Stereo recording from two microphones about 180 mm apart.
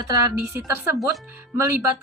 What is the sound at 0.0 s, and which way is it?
A woman's voice, 20° right (ahead or behind).